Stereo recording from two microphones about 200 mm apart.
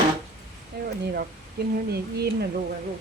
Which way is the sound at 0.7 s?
50° right (ahead or behind).